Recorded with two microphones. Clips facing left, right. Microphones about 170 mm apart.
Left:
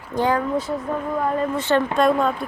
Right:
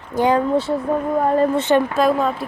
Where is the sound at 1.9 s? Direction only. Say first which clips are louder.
Right 1 dB; centre (ahead or behind).